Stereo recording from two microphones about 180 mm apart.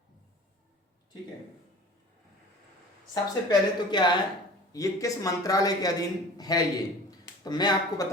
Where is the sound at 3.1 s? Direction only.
25° left (ahead or behind).